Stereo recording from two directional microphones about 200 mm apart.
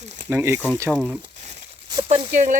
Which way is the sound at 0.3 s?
10° right (ahead or behind).